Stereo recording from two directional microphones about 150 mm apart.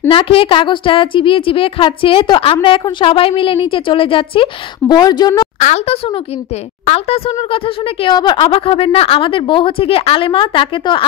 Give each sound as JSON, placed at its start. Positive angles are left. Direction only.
{"t": 0.1, "sound": "speech", "side_deg": 35}
{"t": 5.6, "sound": "speech", "side_deg": 55}
{"t": 6.9, "sound": "speech", "side_deg": 40}